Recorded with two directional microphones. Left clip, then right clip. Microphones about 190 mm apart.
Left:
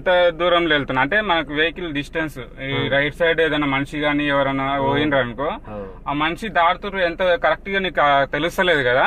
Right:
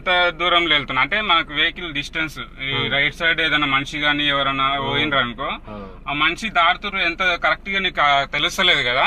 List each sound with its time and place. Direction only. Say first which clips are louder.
0.0 s a man's voice: left 2 dB; 60° left (ahead or behind)